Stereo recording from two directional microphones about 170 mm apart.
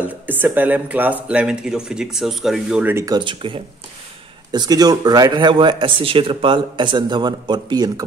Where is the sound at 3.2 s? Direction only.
30° right (ahead or behind).